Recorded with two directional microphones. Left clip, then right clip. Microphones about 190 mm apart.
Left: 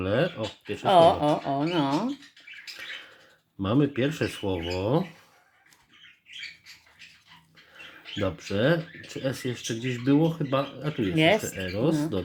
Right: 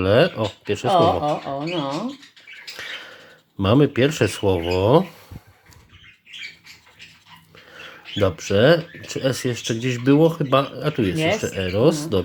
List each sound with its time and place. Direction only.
0.0 s speech: 35° right (ahead or behind)
0.9 s speech: 35° left (ahead or behind)
2.7 s bird flight: 35° right (ahead or behind)
3.6 s speech: 35° right (ahead or behind)
8.2 s speech: 35° right (ahead or behind)